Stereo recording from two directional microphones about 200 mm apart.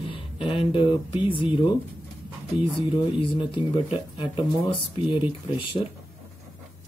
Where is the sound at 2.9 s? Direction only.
25° left (ahead or behind).